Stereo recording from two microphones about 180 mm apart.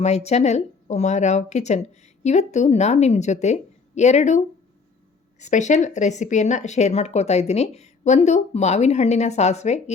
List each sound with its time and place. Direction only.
0.0 s speech: 35° left (ahead or behind)